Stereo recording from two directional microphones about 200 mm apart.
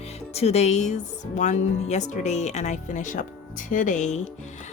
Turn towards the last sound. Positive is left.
turn(degrees=35)  # may be behind; listen again after turning